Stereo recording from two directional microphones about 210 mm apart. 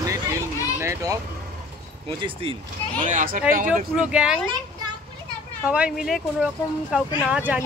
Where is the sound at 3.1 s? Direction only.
35° right (ahead or behind).